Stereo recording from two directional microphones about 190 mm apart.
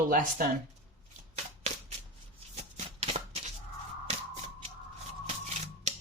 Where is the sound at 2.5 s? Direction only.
30° right (ahead or behind).